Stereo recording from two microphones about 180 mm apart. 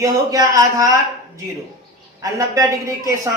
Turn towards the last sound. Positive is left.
turn(degrees=-15)  # may be behind; listen again after turning